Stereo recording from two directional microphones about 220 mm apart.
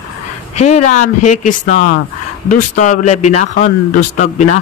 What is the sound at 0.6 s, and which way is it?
Speech, 30° left (ahead or behind).